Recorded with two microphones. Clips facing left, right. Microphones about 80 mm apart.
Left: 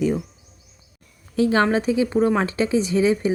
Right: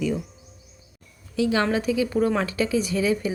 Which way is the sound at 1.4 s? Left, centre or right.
Left.